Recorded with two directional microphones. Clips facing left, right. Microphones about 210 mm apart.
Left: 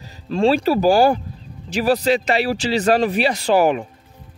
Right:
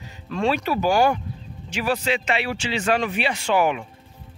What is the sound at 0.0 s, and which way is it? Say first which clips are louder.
Speech: left 6 dB; 35° left (ahead or behind).